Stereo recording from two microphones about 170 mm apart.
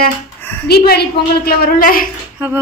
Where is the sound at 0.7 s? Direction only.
70° left (ahead or behind).